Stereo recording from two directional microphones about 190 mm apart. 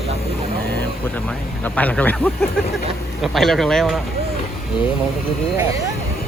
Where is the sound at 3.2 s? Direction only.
Centre (ahead or behind).